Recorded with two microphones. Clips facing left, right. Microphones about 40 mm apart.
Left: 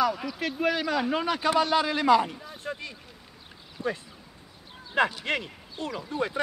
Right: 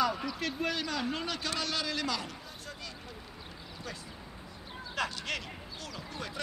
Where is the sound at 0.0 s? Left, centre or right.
Centre; by 3.9 s left.